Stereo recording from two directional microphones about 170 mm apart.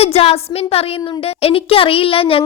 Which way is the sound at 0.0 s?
35° left (ahead or behind).